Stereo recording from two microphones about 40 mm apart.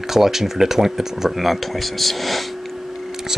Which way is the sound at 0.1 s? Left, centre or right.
Centre.